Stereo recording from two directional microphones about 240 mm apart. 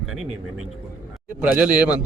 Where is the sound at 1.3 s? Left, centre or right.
Centre.